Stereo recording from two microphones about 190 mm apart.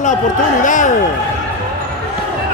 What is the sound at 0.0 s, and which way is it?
Speech, 40° left (ahead or behind).